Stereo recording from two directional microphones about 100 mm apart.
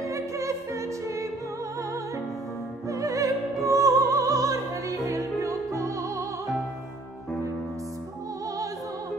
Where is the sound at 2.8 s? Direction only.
35° right (ahead or behind).